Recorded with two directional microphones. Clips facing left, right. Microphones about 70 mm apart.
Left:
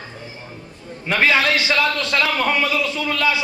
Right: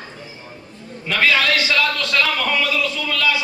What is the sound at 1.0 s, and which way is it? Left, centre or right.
A man's voice, left.